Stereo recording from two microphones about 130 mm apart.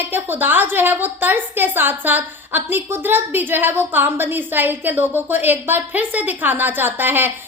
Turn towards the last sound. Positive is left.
turn(degrees=-15)  # may be behind; listen again after turning